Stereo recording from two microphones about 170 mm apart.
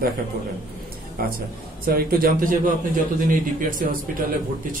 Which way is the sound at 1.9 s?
60° right (ahead or behind).